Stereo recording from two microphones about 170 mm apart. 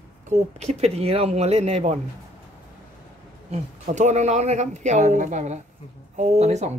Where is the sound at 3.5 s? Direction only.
45° right (ahead or behind).